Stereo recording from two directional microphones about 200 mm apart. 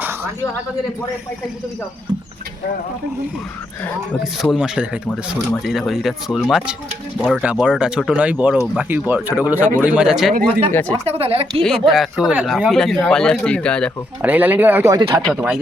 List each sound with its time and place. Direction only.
4.5 s speech: 5° right (ahead or behind)
10.7 s speech: 10° left (ahead or behind)
10.9 s speech: 30° right (ahead or behind)
11.9 s speech: 5° right (ahead or behind)
14.2 s speech: 10° right (ahead or behind)
15.2 s speech: 5° right (ahead or behind)